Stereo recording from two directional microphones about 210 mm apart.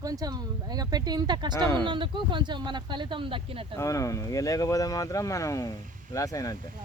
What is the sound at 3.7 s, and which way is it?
Speech, 15° left (ahead or behind).